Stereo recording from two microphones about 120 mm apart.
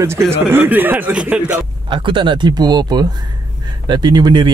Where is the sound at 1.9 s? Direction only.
45° right (ahead or behind).